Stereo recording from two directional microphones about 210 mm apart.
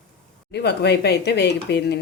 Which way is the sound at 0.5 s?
50° left (ahead or behind).